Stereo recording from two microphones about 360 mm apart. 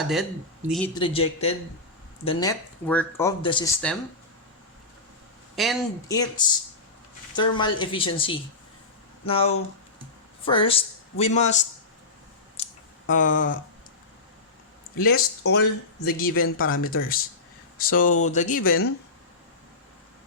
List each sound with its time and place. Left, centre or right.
0.0 s speech: centre
0.9 s speech: centre
5.5 s speech: centre
7.3 s speech: centre
12.6 s a sound: centre
13.1 s speech: left
14.9 s speech: left